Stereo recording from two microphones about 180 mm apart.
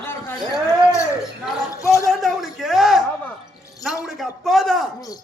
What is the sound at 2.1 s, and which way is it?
A man's voice, centre (ahead or behind).